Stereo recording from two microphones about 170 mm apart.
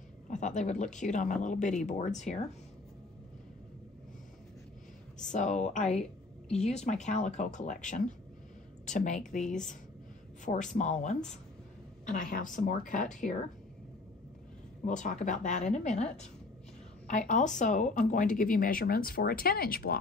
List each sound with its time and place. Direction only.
0.3 s speech: 45° left (ahead or behind)
5.2 s speech: 45° left (ahead or behind)
14.9 s speech: 45° left (ahead or behind)